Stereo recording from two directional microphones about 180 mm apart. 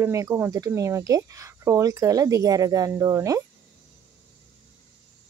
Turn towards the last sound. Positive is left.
turn(degrees=-20)  # may be behind; listen again after turning